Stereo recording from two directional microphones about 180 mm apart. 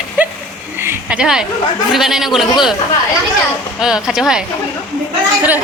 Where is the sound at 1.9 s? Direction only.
Centre (ahead or behind).